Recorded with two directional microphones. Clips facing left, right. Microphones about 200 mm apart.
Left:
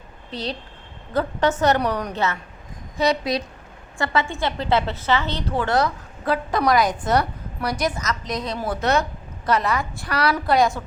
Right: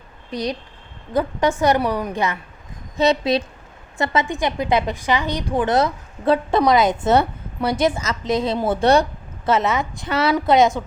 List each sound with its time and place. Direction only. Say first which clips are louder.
0.3 s a woman's voice: right 4 dB; 15° right (ahead or behind)
3.0 s a woman's voice: right 4 dB; 25° right (ahead or behind)